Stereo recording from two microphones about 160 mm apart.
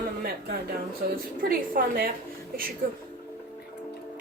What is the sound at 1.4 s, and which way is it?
Speech, 65° right (ahead or behind).